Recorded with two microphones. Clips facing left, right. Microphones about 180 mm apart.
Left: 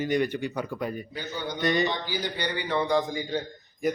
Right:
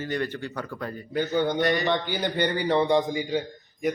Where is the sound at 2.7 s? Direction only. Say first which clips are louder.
Right 2 dB; 25° right (ahead or behind).